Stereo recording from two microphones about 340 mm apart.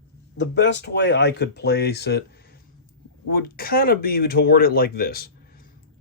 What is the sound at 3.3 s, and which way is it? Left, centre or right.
Speech, left.